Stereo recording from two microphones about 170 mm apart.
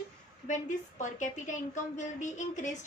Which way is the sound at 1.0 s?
45° left (ahead or behind).